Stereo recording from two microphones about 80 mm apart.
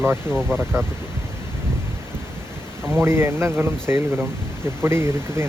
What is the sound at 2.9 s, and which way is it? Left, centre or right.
Speech, right.